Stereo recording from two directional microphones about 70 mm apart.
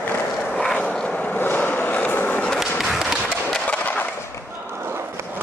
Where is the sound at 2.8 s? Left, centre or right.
Centre.